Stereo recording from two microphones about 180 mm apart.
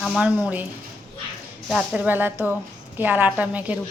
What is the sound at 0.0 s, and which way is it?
Speech, centre (ahead or behind).